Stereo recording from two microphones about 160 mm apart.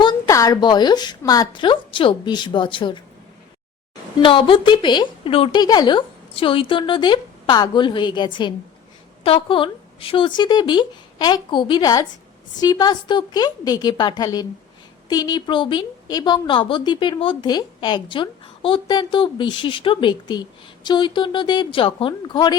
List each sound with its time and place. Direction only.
0.0 s a woman's voice: 25° left (ahead or behind)
4.2 s a woman's voice: 30° left (ahead or behind)